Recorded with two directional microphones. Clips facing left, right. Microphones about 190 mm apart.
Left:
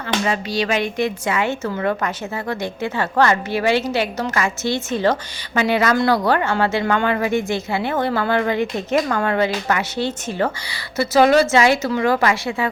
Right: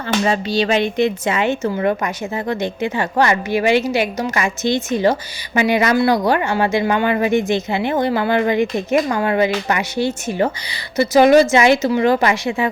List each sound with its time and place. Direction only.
0.3 s a woman's voice: 25° right (ahead or behind)